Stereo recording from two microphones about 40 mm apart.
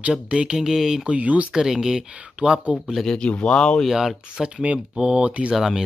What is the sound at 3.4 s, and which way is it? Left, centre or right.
Speech, left.